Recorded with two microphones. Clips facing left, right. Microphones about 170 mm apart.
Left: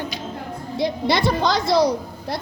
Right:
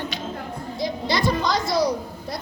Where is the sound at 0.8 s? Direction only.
65° left (ahead or behind).